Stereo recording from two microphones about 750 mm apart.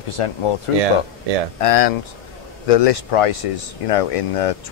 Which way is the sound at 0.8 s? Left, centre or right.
Right.